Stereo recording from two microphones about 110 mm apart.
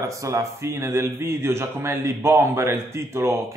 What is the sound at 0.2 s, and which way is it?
Speech, 25° right (ahead or behind).